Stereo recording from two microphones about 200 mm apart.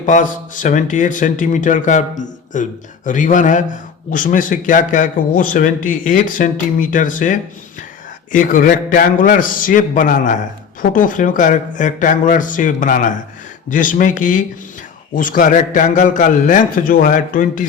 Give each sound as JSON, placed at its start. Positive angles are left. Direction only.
{"t": 0.0, "sound": "speech", "side_deg": 40}